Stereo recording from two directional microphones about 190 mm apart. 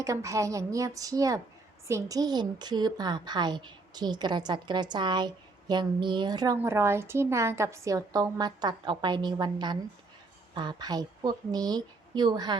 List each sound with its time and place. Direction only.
0.0 s a woman's voice: 15° right (ahead or behind)